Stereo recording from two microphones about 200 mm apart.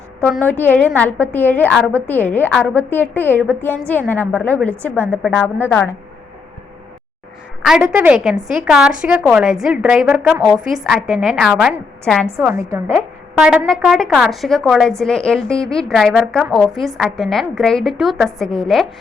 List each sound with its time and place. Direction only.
0.3 s a woman's voice: 5° left (ahead or behind)
7.6 s a woman's voice: centre (ahead or behind)
12.5 s a woman's voice: 10° right (ahead or behind)
13.3 s a woman's voice: centre (ahead or behind)